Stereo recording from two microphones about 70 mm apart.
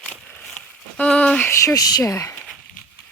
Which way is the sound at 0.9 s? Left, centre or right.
Centre.